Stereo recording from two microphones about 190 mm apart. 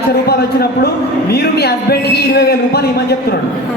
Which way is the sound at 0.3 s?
55° left (ahead or behind).